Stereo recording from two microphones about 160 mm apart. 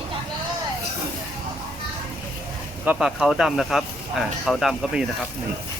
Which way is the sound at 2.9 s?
5° right (ahead or behind).